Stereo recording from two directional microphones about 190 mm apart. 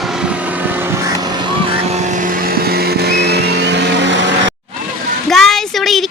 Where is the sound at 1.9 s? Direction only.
40° right (ahead or behind); by 4.5 s 70° right (ahead or behind).